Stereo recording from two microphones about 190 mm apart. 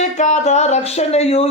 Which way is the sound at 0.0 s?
35° left (ahead or behind).